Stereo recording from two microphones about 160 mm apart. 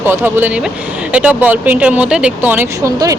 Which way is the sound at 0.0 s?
15° right (ahead or behind).